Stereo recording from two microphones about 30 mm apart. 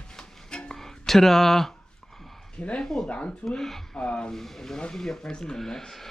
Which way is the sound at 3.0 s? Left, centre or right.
Left.